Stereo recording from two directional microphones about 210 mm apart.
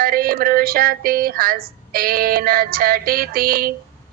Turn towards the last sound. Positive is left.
turn(degrees=-45)  # may be behind; listen again after turning